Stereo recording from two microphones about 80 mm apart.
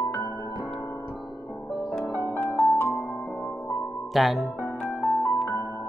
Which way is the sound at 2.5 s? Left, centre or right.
Left.